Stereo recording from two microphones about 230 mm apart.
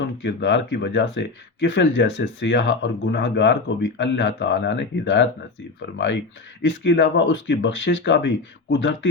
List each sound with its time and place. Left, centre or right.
0.2 s speech: left